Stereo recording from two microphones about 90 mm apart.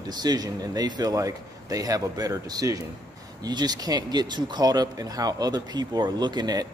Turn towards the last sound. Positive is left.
turn(degrees=-50)  # may be behind; listen again after turning